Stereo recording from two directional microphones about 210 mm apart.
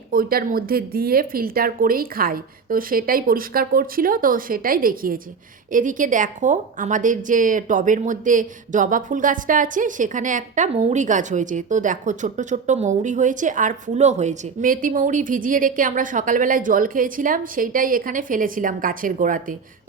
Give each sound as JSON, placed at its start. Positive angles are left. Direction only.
{"t": 0.1, "sound": "a woman's voice", "side_deg": -45}